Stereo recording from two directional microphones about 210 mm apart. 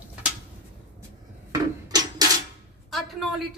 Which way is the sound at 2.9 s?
Centre (ahead or behind).